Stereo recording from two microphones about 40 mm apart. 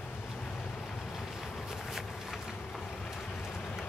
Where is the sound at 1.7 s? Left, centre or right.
Centre.